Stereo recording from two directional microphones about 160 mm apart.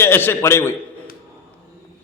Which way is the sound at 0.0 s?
15° left (ahead or behind).